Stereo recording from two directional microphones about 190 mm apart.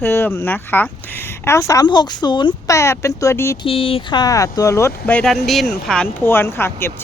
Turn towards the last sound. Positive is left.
turn(degrees=10)  # may be behind; listen again after turning